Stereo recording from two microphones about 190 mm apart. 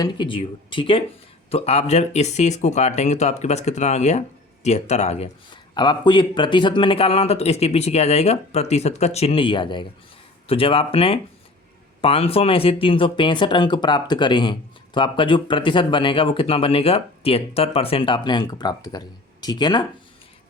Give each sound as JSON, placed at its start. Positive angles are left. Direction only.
{"t": 0.0, "sound": "speech", "side_deg": 25}
{"t": 5.7, "sound": "speech", "side_deg": 25}